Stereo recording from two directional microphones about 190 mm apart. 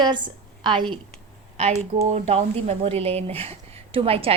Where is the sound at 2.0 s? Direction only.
35° right (ahead or behind).